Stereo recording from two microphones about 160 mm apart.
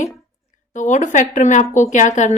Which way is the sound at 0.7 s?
50° left (ahead or behind).